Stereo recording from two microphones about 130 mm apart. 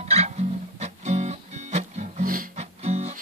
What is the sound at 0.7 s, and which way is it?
Music, 60° right (ahead or behind).